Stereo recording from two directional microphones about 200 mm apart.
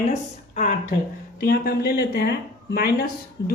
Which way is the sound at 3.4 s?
55° left (ahead or behind).